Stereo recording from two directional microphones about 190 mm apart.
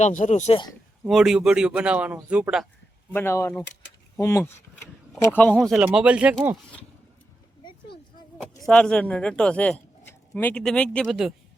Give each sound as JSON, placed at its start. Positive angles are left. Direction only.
{"t": 0.0, "sound": "speech", "side_deg": 40}
{"t": 1.0, "sound": "a man's voice", "side_deg": 0}
{"t": 3.1, "sound": "a man's voice", "side_deg": 10}
{"t": 8.6, "sound": "a man's voice", "side_deg": 5}